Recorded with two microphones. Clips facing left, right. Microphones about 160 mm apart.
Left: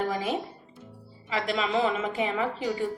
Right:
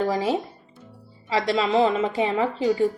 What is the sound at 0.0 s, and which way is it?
A woman's voice, 30° right (ahead or behind).